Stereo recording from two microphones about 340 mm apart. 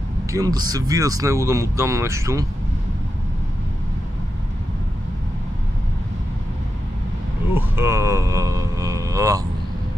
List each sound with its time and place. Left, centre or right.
0.3 s speech: centre
7.5 s speech: centre